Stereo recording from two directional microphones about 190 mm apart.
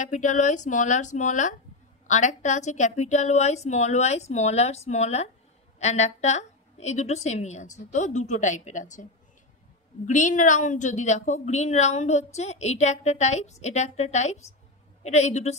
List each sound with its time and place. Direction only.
0.0 s speech: 40° left (ahead or behind)
10.0 s speech: 40° left (ahead or behind)